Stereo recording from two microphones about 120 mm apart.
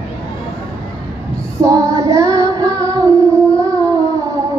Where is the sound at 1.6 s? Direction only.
25° right (ahead or behind).